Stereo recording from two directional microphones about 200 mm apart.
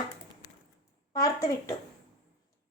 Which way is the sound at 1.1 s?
20° left (ahead or behind).